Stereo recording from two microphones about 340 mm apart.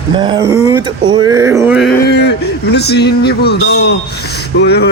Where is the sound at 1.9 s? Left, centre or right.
Left.